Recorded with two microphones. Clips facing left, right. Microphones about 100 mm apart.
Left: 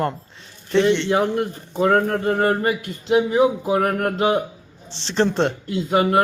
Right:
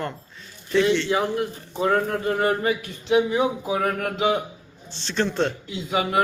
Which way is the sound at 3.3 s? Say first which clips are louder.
Left 5 dB; 50° left (ahead or behind).